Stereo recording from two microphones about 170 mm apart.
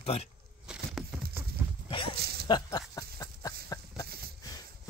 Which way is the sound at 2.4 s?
25° left (ahead or behind).